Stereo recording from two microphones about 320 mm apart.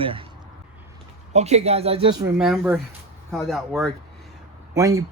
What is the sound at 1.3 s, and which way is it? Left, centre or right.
Speech, centre.